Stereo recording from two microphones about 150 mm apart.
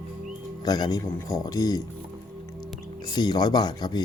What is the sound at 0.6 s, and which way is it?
A man's voice, 25° left (ahead or behind).